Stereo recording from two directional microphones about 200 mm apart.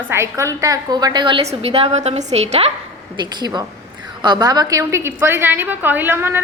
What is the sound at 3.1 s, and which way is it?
A woman's voice, 20° right (ahead or behind).